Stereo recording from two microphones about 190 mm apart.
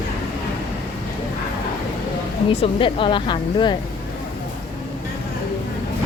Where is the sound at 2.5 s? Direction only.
30° left (ahead or behind).